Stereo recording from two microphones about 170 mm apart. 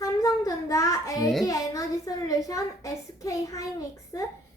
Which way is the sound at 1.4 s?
20° left (ahead or behind).